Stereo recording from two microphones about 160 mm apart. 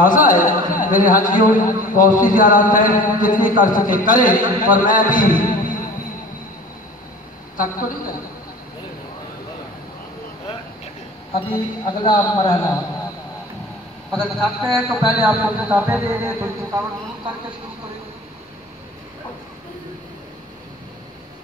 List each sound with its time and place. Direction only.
0.0 s a man's voice: 55° left (ahead or behind)
11.3 s a man's voice: 35° left (ahead or behind)
14.1 s a man's voice: centre (ahead or behind); by 16.8 s 15° right (ahead or behind)